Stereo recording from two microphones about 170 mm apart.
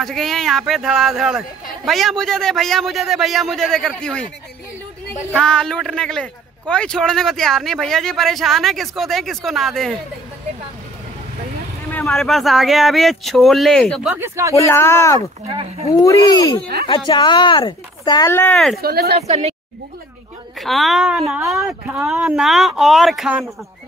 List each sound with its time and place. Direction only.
0.0 s a man's voice: centre (ahead or behind)
5.4 s a man's voice: 5° left (ahead or behind)
11.9 s a man's voice: 5° left (ahead or behind)
14.1 s speech: 15° right (ahead or behind)
14.5 s speech: 15° left (ahead or behind)
15.4 s speech: 35° right (ahead or behind)
16.0 s speech: 20° left (ahead or behind)
18.3 s speech: 10° left (ahead or behind)
18.8 s speech: 65° right (ahead or behind)
19.1 s a woman's voice: 40° right (ahead or behind)
20.5 s a man's voice: centre (ahead or behind)
21.4 s speech: 15° right (ahead or behind)
21.6 s a man's voice: 5° right (ahead or behind)